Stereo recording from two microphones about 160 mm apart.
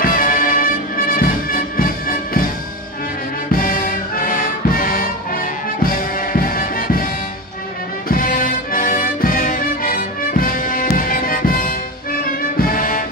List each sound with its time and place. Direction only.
0.0 s music: 55° left (ahead or behind)
3.6 s music: 60° left (ahead or behind)
8.1 s music: 60° left (ahead or behind)